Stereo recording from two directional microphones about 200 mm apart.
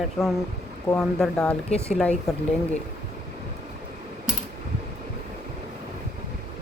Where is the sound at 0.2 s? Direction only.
Centre (ahead or behind).